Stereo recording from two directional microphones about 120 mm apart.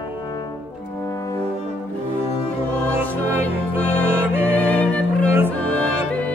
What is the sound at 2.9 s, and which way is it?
Music, 20° right (ahead or behind).